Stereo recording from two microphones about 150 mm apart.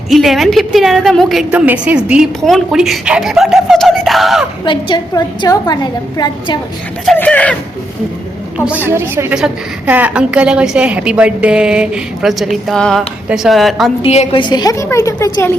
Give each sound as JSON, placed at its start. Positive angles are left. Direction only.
{"t": 0.1, "sound": "speech", "side_deg": 0}
{"t": 4.6, "sound": "a woman's voice", "side_deg": 30}
{"t": 7.2, "sound": "speech", "side_deg": 10}
{"t": 8.5, "sound": "a woman's voice", "side_deg": -10}
{"t": 14.0, "sound": "a woman's voice", "side_deg": 40}
{"t": 14.4, "sound": "a woman's voice", "side_deg": 25}